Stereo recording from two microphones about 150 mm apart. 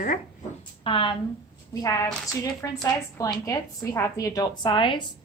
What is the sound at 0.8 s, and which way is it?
Speech, 35° left (ahead or behind).